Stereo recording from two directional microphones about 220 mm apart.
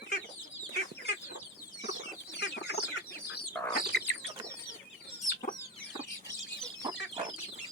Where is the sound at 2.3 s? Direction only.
50° left (ahead or behind).